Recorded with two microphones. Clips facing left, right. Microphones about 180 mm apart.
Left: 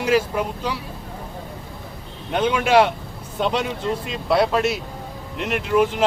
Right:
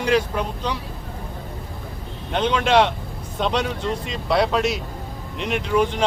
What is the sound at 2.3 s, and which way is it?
A man's voice, 10° left (ahead or behind).